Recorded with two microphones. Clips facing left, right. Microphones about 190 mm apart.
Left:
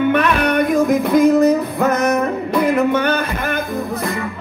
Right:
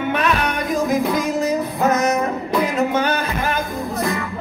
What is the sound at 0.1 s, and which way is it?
Music, 55° left (ahead or behind).